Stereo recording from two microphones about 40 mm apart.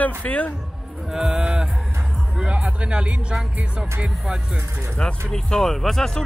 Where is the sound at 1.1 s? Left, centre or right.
Centre.